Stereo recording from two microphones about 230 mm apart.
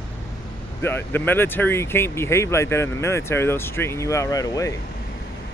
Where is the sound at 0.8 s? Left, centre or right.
Centre.